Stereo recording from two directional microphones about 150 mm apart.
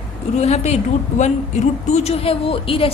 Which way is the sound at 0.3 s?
50° left (ahead or behind).